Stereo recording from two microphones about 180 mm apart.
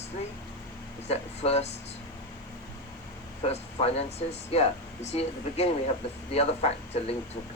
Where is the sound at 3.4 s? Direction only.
35° left (ahead or behind).